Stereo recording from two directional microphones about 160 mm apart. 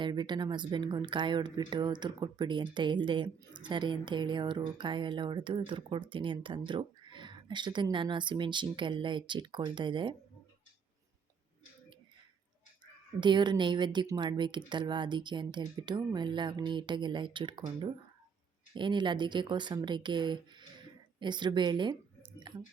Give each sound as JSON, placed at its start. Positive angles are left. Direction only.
{"t": 0.0, "sound": "speech", "side_deg": -30}
{"t": 12.8, "sound": "speech", "side_deg": -30}